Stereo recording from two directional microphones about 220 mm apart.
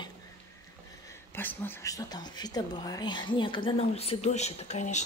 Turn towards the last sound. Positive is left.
turn(degrees=30)  # may be behind; listen again after turning